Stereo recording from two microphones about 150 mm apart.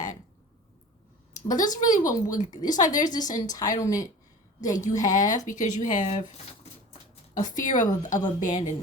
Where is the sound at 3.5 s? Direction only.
25° left (ahead or behind).